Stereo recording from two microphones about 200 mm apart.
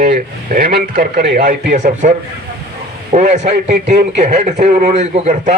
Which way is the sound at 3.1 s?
35° right (ahead or behind).